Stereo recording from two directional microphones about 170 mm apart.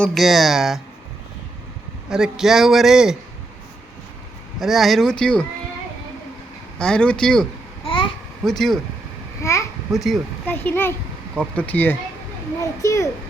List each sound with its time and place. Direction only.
0.0 s a man's voice: centre (ahead or behind)
2.0 s a man's voice: 5° right (ahead or behind)
4.6 s a man's voice: centre (ahead or behind)
6.7 s a man's voice: 5° left (ahead or behind)
7.9 s babbling: 30° left (ahead or behind)
8.4 s a man's voice: centre (ahead or behind)
9.4 s a child's voice: 15° left (ahead or behind)
9.9 s a man's voice: centre (ahead or behind)
10.4 s a child's voice: 10° left (ahead or behind)